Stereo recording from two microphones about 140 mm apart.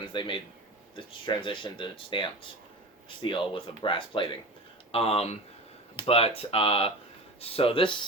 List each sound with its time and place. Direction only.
0.1 s speech: 35° left (ahead or behind)